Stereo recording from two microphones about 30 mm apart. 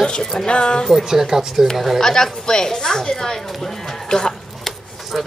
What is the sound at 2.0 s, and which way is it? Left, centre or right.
A woman's voice, centre.